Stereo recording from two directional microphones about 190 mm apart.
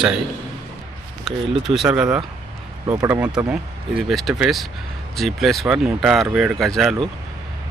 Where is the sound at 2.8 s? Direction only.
20° right (ahead or behind).